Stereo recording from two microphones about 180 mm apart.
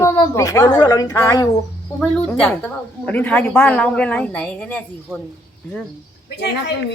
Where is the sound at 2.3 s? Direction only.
5° left (ahead or behind).